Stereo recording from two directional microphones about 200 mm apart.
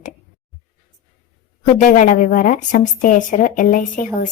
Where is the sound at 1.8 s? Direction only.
40° left (ahead or behind).